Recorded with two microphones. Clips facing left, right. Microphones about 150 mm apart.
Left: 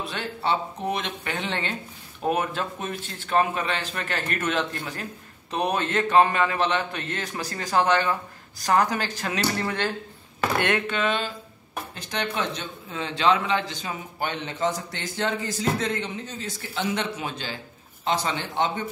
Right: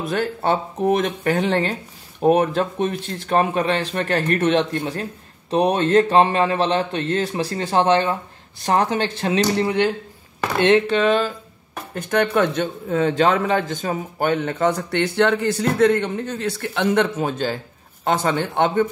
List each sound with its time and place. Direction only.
0.0 s a man's voice: 45° right (ahead or behind); by 9.9 s 15° right (ahead or behind)
10.6 s speech: 30° right (ahead or behind)
11.9 s speech: 55° right (ahead or behind)
16.8 s speech: 50° right (ahead or behind)